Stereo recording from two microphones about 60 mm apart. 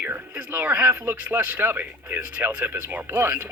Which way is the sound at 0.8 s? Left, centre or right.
Right.